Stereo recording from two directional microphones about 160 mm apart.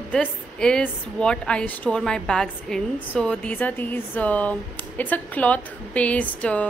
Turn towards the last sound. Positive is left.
turn(degrees=10)  # may be behind; listen again after turning